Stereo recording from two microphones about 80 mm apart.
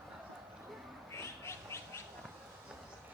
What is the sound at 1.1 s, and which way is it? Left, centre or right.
Bird, left.